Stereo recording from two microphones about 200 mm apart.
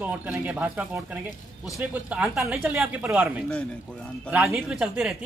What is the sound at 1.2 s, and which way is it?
Speech, 15° left (ahead or behind).